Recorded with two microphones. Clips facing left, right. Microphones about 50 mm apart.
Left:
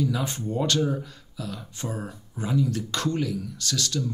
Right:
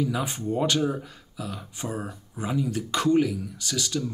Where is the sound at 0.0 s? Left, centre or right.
Centre.